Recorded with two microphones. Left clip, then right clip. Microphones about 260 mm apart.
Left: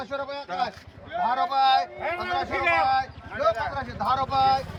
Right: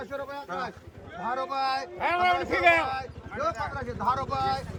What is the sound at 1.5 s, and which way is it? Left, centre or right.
Speech, centre.